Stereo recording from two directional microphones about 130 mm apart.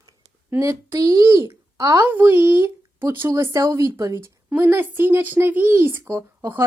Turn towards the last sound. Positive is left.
turn(degrees=-20)  # may be behind; listen again after turning